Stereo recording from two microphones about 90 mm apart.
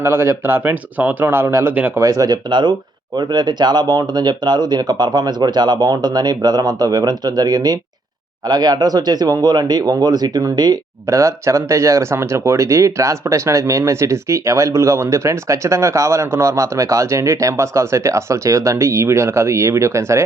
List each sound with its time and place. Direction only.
0.0 s speech: 25° right (ahead or behind)
2.0 s speech: 40° right (ahead or behind)
11.0 s speech: 30° right (ahead or behind)